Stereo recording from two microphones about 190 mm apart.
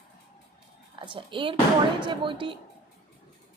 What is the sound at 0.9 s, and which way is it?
A woman's voice, 25° right (ahead or behind).